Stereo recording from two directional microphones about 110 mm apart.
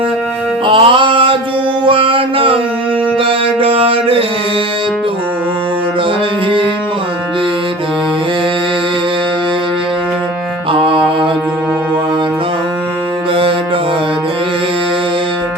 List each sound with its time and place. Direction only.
0.6 s music: 50° right (ahead or behind)
1.8 s mantra: 50° right (ahead or behind)
3.2 s music: 55° right (ahead or behind)
10.7 s music: 50° right (ahead or behind)